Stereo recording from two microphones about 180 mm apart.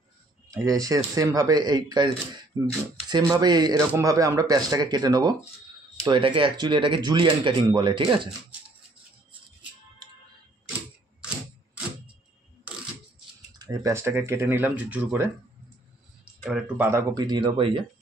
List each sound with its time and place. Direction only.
0.5 s speech: 20° right (ahead or behind)
13.6 s speech: 20° right (ahead or behind)
16.4 s speech: 10° right (ahead or behind)
17.1 s speech: 25° right (ahead or behind)